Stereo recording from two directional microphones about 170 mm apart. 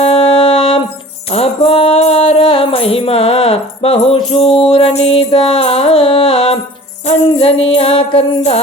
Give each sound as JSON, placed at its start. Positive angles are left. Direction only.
{"t": 0.0, "sound": "music", "side_deg": 35}